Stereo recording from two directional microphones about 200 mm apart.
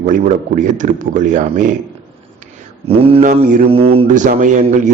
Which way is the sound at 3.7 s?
30° right (ahead or behind).